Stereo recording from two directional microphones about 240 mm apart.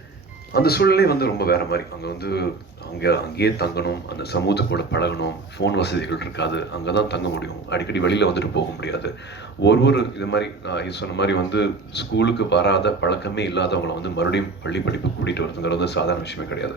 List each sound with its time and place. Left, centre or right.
0.5 s speech: left